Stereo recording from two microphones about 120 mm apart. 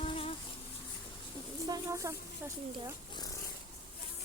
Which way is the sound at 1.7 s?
25° right (ahead or behind).